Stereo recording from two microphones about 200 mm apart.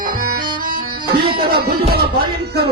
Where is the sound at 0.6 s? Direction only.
45° right (ahead or behind).